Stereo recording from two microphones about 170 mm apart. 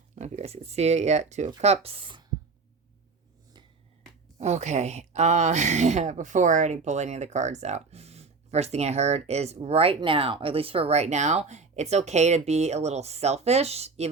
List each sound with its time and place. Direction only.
0.2 s speech: 40° right (ahead or behind)
4.4 s speech: 40° right (ahead or behind)